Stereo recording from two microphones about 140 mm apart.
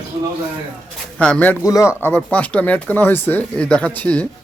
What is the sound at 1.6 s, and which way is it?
A man's voice, 25° left (ahead or behind).